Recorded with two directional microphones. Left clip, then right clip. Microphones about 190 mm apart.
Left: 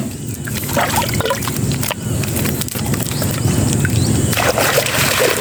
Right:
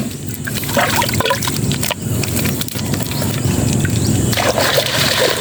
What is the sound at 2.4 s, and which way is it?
Clip-clop, 15° right (ahead or behind).